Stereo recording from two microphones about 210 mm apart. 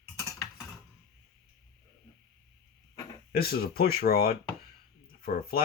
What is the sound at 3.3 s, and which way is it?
Speech, 45° left (ahead or behind).